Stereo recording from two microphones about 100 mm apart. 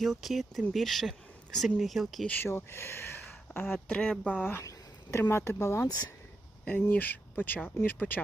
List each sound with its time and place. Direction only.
0.0 s speech: centre (ahead or behind)
2.2 s speech: 20° left (ahead or behind)
3.8 s speech: 10° left (ahead or behind)
5.1 s speech: 25° left (ahead or behind)
6.7 s speech: 15° left (ahead or behind)